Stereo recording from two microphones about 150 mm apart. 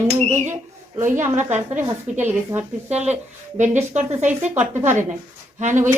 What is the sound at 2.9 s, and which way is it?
A woman's voice, 50° right (ahead or behind).